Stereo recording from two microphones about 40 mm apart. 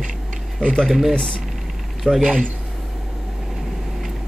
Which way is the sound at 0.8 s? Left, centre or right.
Centre.